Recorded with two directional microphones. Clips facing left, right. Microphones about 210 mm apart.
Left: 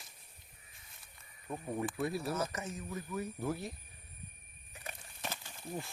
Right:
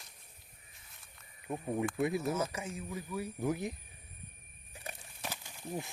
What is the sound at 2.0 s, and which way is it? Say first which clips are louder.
Speech: right 4 dB; 20° right (ahead or behind).